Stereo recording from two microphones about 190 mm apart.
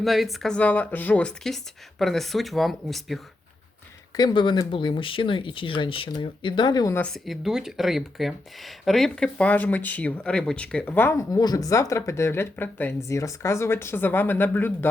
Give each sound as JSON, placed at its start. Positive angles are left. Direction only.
{"t": 0.0, "sound": "speech", "side_deg": 0}
{"t": 4.2, "sound": "speech", "side_deg": 20}
{"t": 7.0, "sound": "speech", "side_deg": 0}